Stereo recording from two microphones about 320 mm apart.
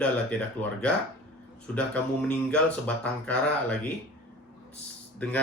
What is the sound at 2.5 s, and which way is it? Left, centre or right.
Speech, centre.